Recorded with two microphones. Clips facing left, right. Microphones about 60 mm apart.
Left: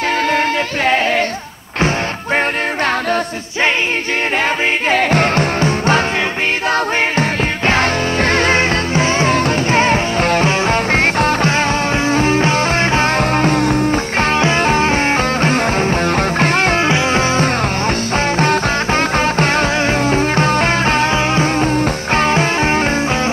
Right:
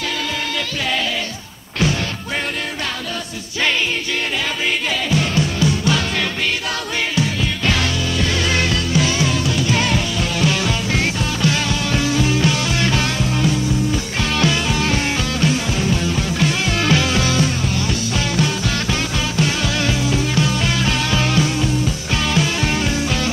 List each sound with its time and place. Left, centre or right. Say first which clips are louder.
4.9 s music: left 6 dB; left
7.2 s music: left 4 dB; left
13.2 s music: left 6 dB; left
14.3 s music: left 4 dB; left
16.8 s music: left 3 dB; left